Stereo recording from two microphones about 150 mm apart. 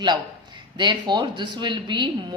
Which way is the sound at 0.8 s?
30° right (ahead or behind).